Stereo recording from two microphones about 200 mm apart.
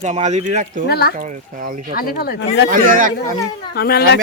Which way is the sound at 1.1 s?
40° right (ahead or behind).